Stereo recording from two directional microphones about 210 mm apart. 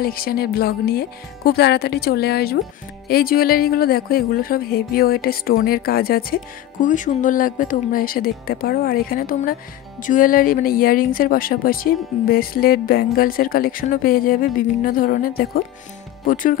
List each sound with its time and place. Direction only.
0.0 s speech: 45° left (ahead or behind)